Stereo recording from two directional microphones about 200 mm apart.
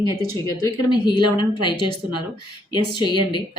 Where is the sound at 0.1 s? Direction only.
20° left (ahead or behind).